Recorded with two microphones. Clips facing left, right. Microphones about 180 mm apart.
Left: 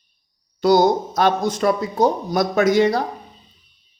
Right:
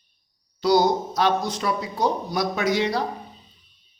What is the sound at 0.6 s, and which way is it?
Speech, 50° left (ahead or behind).